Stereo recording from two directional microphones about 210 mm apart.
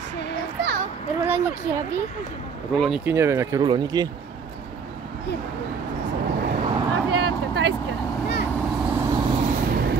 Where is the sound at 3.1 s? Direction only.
15° right (ahead or behind).